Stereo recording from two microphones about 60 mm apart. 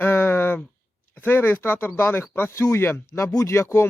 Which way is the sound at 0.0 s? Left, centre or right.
Left.